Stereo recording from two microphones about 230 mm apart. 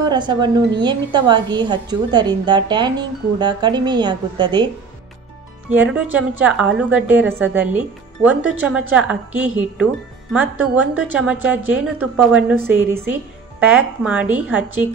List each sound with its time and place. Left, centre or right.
0.1 s a woman's voice: centre
5.8 s a woman's voice: centre